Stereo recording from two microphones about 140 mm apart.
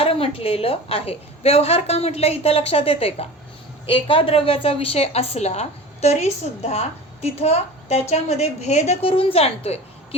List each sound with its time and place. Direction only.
0.0 s a woman's voice: 40° left (ahead or behind)